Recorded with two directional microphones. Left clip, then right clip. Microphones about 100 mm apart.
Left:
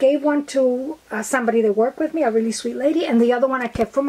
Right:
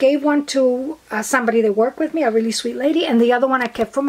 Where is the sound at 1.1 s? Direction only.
15° right (ahead or behind).